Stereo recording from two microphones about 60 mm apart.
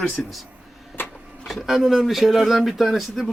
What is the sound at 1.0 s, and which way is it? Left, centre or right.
Printer, left.